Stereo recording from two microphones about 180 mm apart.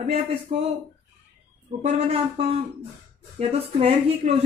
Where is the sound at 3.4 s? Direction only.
35° right (ahead or behind).